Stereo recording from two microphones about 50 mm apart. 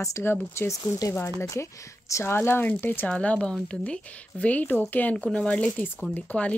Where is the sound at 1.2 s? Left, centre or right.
Left.